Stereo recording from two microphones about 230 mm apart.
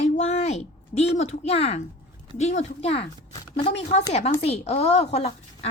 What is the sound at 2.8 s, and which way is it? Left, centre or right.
Speech, left.